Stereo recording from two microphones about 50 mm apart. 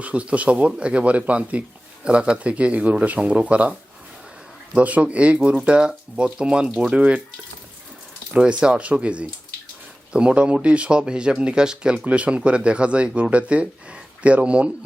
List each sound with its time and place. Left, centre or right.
0.0 s speech: right
8.3 s speech: right